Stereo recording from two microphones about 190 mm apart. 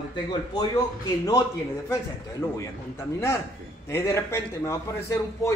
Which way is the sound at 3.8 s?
15° left (ahead or behind).